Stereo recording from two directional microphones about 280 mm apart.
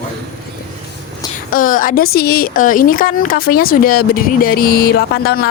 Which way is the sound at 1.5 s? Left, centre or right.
Left.